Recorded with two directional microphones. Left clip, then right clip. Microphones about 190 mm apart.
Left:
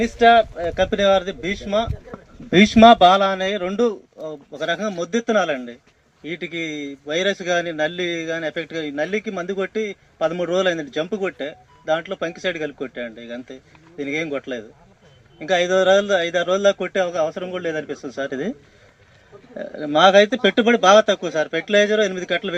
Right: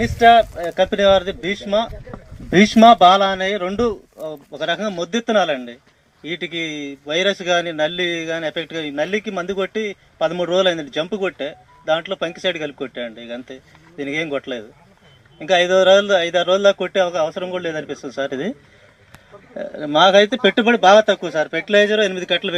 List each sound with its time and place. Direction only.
0.0 s a man's voice: 35° right (ahead or behind)
19.5 s a man's voice: 50° right (ahead or behind)